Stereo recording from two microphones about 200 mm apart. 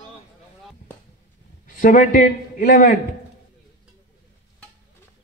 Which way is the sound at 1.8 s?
40° left (ahead or behind).